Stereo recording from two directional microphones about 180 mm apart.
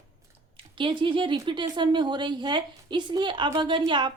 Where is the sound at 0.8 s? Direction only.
30° right (ahead or behind).